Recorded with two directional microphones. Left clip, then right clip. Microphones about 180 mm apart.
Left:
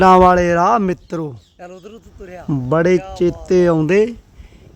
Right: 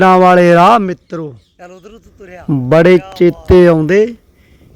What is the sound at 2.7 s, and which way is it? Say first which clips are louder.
Speech: right 7 dB; 20° right (ahead or behind).